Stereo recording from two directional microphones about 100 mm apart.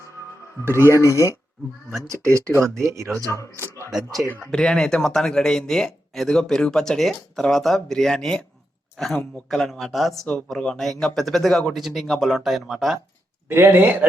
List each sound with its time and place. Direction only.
0.6 s a man's voice: 25° right (ahead or behind)
1.0 s speech: 30° left (ahead or behind)
2.0 s speech: 30° right (ahead or behind)
4.5 s speech: 5° left (ahead or behind)
13.5 s a man's voice: 20° right (ahead or behind)